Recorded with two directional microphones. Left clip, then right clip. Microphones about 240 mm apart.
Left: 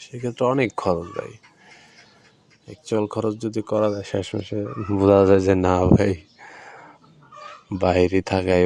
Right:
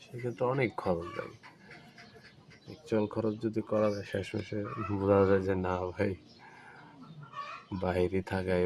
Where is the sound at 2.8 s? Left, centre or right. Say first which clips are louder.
Left 8 dB; left.